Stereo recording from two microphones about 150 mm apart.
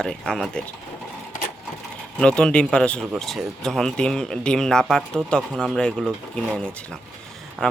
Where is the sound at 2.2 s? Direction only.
5° left (ahead or behind).